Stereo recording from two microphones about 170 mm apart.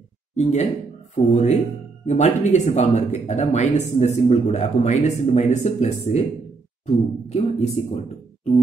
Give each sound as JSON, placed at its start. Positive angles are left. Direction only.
{"t": 0.4, "sound": "speech", "side_deg": 40}
{"t": 7.2, "sound": "speech", "side_deg": 40}